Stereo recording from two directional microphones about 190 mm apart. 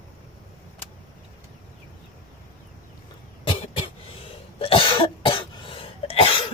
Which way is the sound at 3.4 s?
30° left (ahead or behind).